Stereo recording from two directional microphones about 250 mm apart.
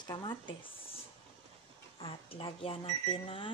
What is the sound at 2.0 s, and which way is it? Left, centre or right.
Speech, left.